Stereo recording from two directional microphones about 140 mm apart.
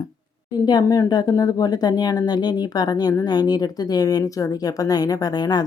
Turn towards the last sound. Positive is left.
turn(degrees=30)  # may be behind; listen again after turning